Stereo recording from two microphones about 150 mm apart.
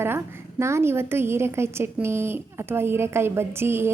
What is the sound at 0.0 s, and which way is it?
A woman's voice, 15° right (ahead or behind).